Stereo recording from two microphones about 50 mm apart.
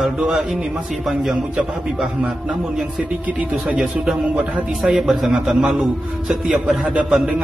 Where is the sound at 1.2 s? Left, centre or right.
Centre.